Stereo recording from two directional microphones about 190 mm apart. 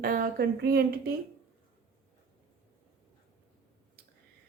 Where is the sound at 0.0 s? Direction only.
50° right (ahead or behind).